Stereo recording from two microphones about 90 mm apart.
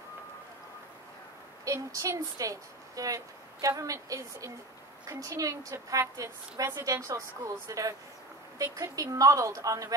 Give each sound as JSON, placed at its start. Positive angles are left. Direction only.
{"t": 1.6, "sound": "a woman's voice", "side_deg": -35}